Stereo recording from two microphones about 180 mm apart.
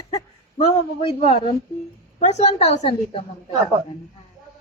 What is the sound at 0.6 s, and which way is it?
Speech, 30° left (ahead or behind).